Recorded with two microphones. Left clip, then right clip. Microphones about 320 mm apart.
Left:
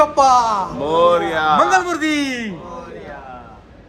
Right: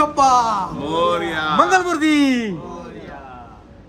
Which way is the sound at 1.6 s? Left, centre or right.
Centre.